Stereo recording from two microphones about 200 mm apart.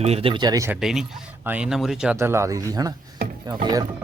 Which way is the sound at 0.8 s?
Centre (ahead or behind).